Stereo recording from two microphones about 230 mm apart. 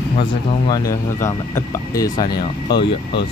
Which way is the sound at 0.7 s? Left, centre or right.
Centre.